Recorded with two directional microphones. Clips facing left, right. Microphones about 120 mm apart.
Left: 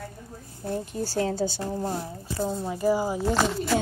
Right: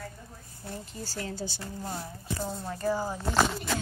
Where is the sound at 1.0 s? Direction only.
70° left (ahead or behind).